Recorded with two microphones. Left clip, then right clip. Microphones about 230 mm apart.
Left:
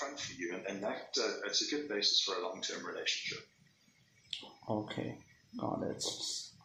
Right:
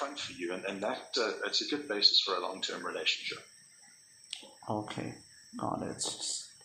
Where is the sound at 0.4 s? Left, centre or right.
Centre.